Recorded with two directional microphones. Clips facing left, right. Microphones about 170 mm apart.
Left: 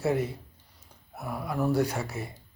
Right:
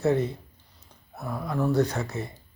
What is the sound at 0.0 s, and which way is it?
Speech, 10° left (ahead or behind).